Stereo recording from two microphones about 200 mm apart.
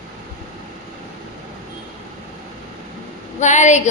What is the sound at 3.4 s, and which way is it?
Speech, 35° left (ahead or behind).